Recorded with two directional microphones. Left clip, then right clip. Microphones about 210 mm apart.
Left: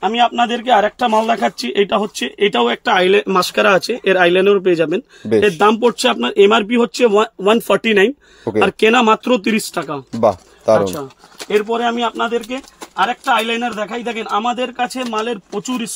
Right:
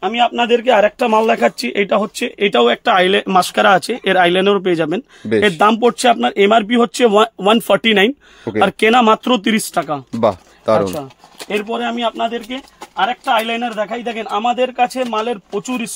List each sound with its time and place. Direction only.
0.0 s a man's voice: 20° right (ahead or behind)
10.2 s speech: 10° right (ahead or behind); by 15.9 s 30° right (ahead or behind)